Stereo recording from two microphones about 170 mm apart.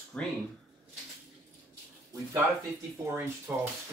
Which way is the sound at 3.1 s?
15° right (ahead or behind).